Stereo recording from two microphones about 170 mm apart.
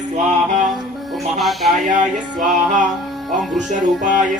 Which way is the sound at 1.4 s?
Centre (ahead or behind).